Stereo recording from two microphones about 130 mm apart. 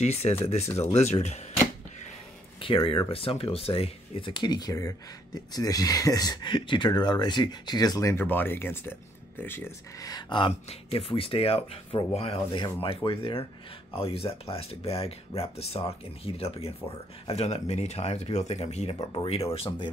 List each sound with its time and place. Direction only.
0.0 s speech: 55° left (ahead or behind)
2.6 s speech: 40° left (ahead or behind)
10.7 s speech: 45° left (ahead or behind)